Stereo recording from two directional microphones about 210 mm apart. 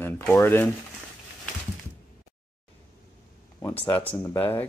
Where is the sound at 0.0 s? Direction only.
10° left (ahead or behind).